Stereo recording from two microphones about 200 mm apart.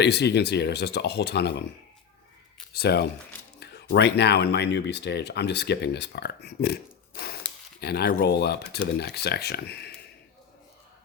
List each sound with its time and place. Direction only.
0.0 s speech: 55° left (ahead or behind)
2.7 s speech: 50° left (ahead or behind)